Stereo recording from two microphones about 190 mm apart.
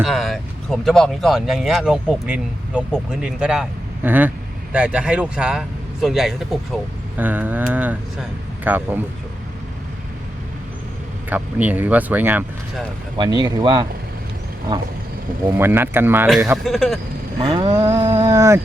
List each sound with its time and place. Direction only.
0.0 s speech: centre (ahead or behind)
11.3 s speech: 10° right (ahead or behind)
13.1 s speech: 20° right (ahead or behind)
15.5 s speech: 10° right (ahead or behind)
16.6 s speech: centre (ahead or behind)
17.4 s cattle: 25° right (ahead or behind)